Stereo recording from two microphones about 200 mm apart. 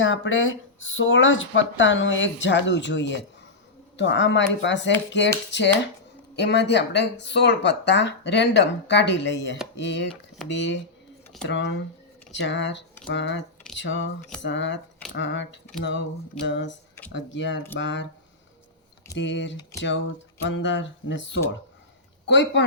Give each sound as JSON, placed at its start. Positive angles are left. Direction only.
{"t": 0.0, "sound": "speech", "side_deg": 75}
{"t": 19.1, "sound": "speech", "side_deg": 65}